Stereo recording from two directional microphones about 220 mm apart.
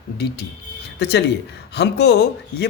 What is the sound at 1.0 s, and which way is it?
Speech, 50° left (ahead or behind).